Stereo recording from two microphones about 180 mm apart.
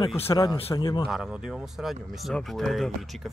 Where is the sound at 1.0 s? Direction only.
Centre (ahead or behind).